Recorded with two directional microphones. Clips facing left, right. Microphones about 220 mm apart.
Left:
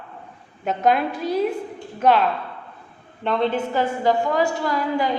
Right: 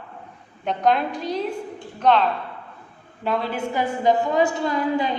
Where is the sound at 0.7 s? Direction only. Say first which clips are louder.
Left 1 dB; 5° left (ahead or behind).